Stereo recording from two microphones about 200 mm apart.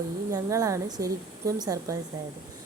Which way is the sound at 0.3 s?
15° right (ahead or behind).